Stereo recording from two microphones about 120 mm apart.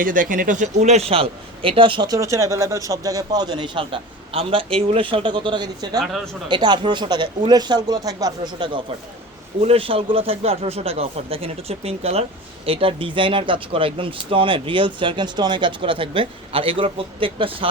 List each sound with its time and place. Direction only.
0.1 s speech: 90° right; by 2.0 s 45° right (ahead or behind)
2.0 s speech: 25° right (ahead or behind)
6.0 s speech: centre (ahead or behind)
6.5 s speech: 40° right (ahead or behind)
8.5 s speech: 45° right (ahead or behind)
9.6 s speech: 55° right (ahead or behind)